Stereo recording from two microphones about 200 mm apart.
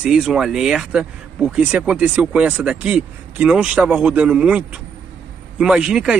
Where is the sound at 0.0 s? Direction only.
5° right (ahead or behind).